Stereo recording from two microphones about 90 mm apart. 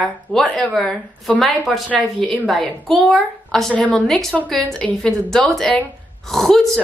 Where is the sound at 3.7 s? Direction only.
15° left (ahead or behind).